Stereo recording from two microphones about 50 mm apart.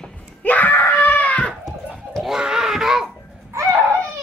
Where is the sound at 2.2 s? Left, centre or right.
Centre.